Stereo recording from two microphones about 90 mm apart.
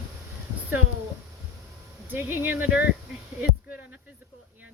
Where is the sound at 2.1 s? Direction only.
25° right (ahead or behind).